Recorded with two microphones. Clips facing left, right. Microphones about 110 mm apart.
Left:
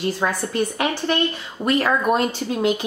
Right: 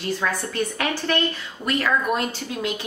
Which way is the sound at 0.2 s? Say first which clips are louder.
Left 3 dB; 25° left (ahead or behind).